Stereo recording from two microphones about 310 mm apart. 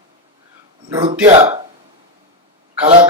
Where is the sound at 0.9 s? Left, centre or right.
Centre.